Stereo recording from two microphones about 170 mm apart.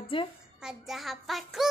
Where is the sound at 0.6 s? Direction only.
Centre (ahead or behind).